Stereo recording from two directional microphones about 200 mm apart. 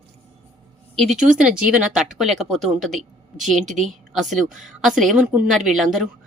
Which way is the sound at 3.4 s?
35° right (ahead or behind).